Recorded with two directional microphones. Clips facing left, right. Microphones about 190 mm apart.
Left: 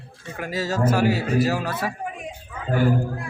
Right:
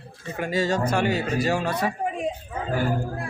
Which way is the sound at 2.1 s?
30° right (ahead or behind).